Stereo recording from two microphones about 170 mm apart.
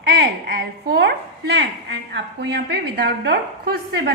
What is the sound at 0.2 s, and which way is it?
A woman's voice, 70° right (ahead or behind).